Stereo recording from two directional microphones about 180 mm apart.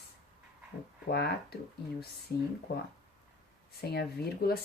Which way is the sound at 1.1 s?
65° left (ahead or behind).